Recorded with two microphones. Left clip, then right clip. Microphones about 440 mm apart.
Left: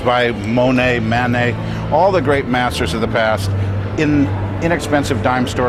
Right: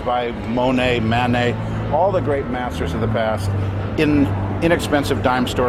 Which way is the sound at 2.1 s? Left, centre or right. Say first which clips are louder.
Left 5 dB; left.